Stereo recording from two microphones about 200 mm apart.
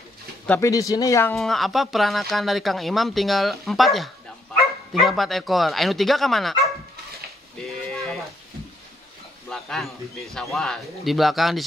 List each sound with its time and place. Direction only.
0.5 s speech: 15° left (ahead or behind)
1.3 s speech: centre (ahead or behind)
7.5 s a sound: centre (ahead or behind)
9.5 s speech: centre (ahead or behind)